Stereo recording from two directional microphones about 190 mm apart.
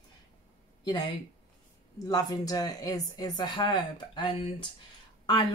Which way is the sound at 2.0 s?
20° left (ahead or behind).